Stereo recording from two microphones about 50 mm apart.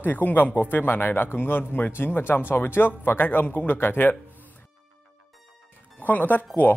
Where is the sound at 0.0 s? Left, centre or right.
Left.